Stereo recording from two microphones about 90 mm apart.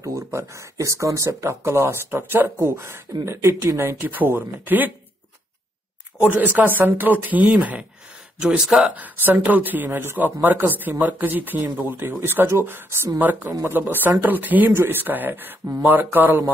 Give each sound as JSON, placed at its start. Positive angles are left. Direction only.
{"t": 0.0, "sound": "speech", "side_deg": -30}
{"t": 6.2, "sound": "speech", "side_deg": -20}